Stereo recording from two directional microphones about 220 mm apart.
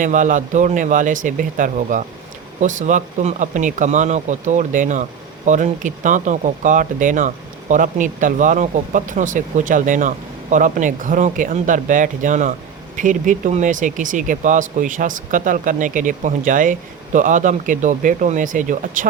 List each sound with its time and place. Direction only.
0.0 s speech: 35° right (ahead or behind)